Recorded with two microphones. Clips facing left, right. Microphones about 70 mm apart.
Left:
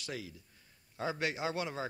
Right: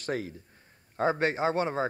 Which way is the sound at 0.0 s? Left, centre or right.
Right.